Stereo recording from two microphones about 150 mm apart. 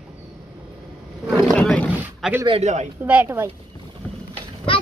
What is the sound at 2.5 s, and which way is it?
Speech, 45° right (ahead or behind).